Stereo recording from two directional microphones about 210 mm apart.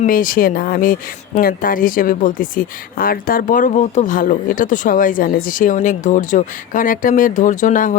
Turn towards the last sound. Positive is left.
turn(degrees=40)  # may be behind; listen again after turning